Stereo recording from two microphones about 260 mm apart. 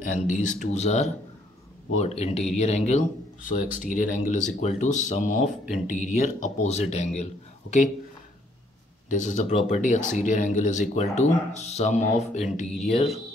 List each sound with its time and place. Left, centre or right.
0.0 s speech: left
9.1 s speech: left